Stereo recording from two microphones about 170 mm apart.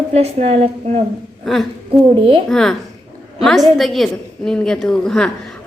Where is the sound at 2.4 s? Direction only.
5° left (ahead or behind).